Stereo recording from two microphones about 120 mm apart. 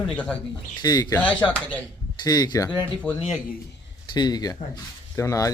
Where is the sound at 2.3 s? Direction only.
35° left (ahead or behind).